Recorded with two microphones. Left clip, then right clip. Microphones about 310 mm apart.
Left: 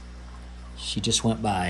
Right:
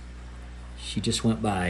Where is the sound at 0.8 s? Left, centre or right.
Centre.